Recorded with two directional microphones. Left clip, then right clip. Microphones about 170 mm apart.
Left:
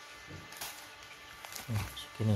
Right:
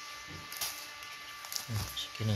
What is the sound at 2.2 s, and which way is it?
Speech, 25° left (ahead or behind).